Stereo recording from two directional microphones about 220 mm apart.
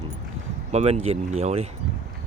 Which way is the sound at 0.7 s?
30° right (ahead or behind).